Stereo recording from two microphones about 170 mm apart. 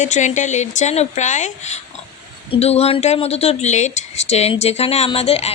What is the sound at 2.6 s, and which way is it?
A woman's voice, 35° left (ahead or behind).